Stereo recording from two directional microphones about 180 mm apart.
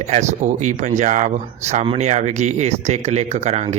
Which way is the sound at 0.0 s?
40° right (ahead or behind).